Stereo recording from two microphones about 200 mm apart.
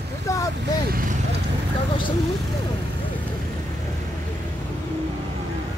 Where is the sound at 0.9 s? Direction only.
45° right (ahead or behind).